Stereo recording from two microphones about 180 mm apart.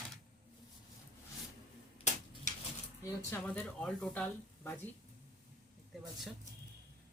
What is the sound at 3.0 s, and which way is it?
Speech, 10° left (ahead or behind).